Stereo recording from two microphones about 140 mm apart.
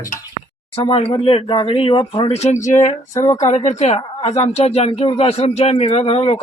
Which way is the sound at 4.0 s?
40° left (ahead or behind).